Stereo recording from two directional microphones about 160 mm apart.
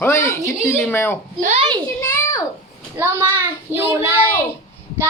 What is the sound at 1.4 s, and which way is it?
Speech, 40° right (ahead or behind).